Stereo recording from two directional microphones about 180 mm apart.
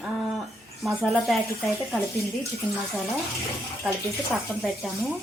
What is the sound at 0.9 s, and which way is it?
Speech, centre (ahead or behind).